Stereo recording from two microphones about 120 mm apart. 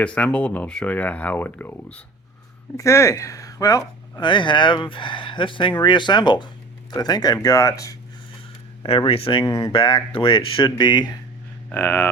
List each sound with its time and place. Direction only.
0.0 s speech: 10° left (ahead or behind); by 4.3 s 30° left (ahead or behind)
4.3 s speech: 40° left (ahead or behind); by 7.9 s 25° left (ahead or behind)
8.8 s speech: 50° left (ahead or behind)
9.4 s speech: 35° left (ahead or behind)
9.7 s speech: 45° left (ahead or behind)
11.7 s speech: 20° left (ahead or behind)